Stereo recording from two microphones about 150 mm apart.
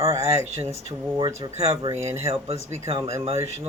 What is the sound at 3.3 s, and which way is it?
Speech, 20° right (ahead or behind).